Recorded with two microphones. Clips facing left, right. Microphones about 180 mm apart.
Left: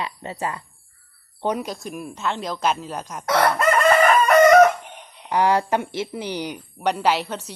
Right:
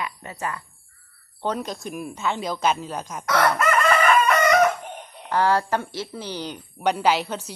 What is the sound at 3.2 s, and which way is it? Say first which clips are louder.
Chicken: left 2 dB; 30° left (ahead or behind).